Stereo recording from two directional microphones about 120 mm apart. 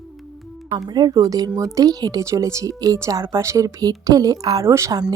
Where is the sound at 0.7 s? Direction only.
35° right (ahead or behind).